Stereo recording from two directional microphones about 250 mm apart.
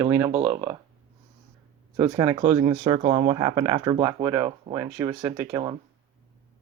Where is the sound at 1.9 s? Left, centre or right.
Centre.